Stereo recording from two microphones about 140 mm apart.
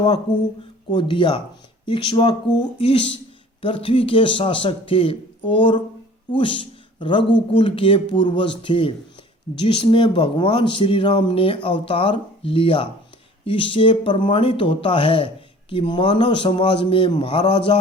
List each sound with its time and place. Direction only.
0.9 s speech: 35° left (ahead or behind)